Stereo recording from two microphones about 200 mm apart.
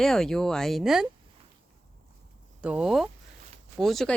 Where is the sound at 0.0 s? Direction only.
5° left (ahead or behind).